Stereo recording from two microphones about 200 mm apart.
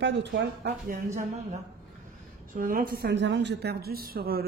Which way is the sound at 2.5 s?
45° right (ahead or behind).